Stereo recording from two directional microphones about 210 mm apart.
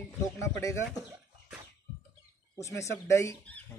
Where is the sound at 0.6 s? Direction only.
15° left (ahead or behind).